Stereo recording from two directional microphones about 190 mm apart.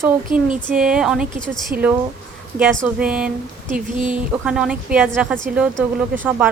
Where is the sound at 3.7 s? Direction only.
45° right (ahead or behind).